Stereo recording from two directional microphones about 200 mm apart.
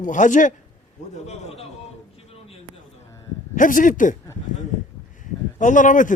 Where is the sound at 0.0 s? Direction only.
40° left (ahead or behind).